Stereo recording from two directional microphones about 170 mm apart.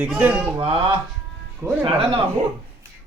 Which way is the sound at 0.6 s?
35° right (ahead or behind).